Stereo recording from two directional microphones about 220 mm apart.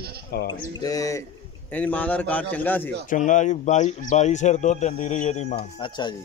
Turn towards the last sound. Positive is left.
turn(degrees=20)  # may be behind; listen again after turning